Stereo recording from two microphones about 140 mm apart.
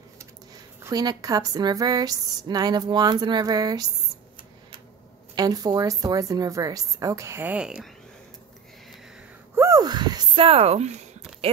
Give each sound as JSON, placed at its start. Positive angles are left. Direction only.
{"t": 0.8, "sound": "a woman's voice", "side_deg": -25}
{"t": 5.3, "sound": "a woman's voice", "side_deg": -25}
{"t": 9.6, "sound": "a sound", "side_deg": -25}